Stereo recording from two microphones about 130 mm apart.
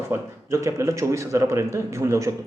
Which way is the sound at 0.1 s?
20° right (ahead or behind).